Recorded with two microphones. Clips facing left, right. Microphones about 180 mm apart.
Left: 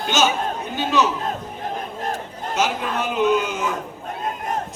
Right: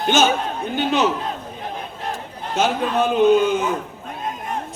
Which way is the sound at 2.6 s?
55° right (ahead or behind).